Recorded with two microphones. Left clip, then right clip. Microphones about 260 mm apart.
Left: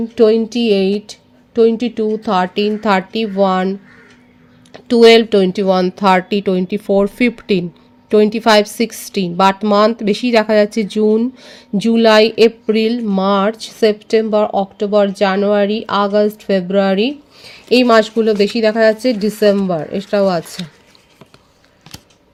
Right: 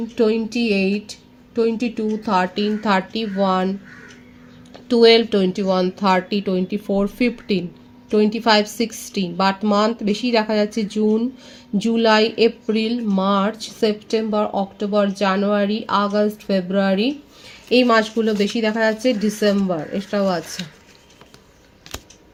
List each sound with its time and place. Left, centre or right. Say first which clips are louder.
0.2 s a woman's voice: left 7 dB; left